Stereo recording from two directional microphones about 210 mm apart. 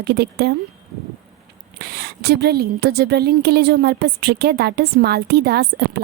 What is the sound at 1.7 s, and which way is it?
Speech, 50° right (ahead or behind).